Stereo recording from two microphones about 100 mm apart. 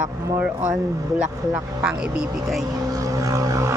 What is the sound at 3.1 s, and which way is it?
Vehicle, 35° right (ahead or behind).